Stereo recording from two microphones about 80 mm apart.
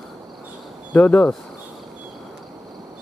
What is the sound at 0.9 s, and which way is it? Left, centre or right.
Speech, left.